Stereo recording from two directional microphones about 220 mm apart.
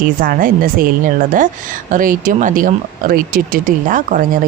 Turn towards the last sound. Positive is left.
turn(degrees=-35)  # may be behind; listen again after turning